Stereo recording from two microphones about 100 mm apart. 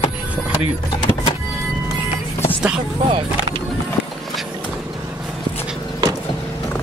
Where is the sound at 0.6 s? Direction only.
60° left (ahead or behind).